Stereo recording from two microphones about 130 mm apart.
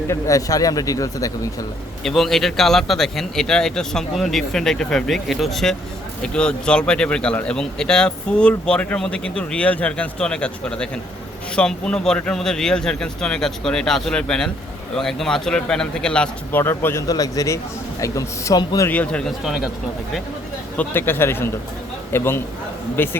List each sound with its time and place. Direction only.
0.1 s speech: 25° left (ahead or behind)
2.0 s a man's voice: centre (ahead or behind); by 18.9 s 25° left (ahead or behind)
18.9 s a man's voice: 10° left (ahead or behind)
20.7 s a man's voice: 15° left (ahead or behind)